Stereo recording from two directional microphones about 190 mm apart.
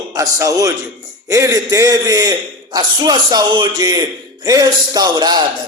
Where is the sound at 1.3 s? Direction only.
15° right (ahead or behind).